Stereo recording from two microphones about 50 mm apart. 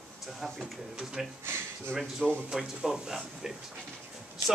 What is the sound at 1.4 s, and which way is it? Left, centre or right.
Speech, right.